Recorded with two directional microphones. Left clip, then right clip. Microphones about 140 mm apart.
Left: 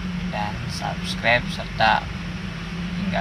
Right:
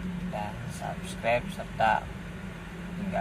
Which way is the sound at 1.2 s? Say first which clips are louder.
Left 7 dB; centre (ahead or behind).